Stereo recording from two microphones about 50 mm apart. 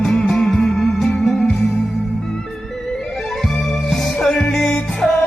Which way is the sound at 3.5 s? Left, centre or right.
Centre.